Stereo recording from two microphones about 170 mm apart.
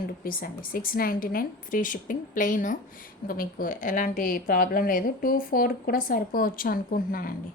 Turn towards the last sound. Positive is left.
turn(degrees=60)  # may be behind; listen again after turning